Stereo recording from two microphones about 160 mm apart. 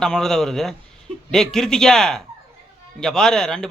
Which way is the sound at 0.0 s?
5° left (ahead or behind).